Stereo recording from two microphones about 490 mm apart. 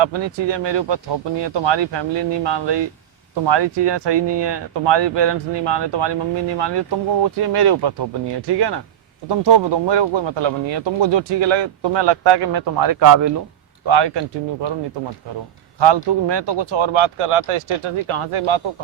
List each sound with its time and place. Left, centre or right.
0.0 s speech: right
13.8 s speech: right
15.8 s speech: right